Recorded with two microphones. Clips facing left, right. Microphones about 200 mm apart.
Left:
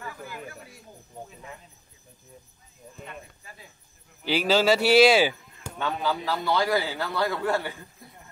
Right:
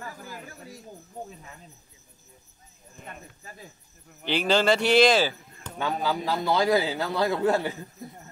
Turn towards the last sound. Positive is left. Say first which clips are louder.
# right 3 dB
turn(degrees=-20)  # may be behind; listen again after turning